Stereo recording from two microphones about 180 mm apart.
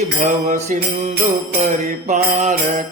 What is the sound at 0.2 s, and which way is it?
Mantra, 45° right (ahead or behind).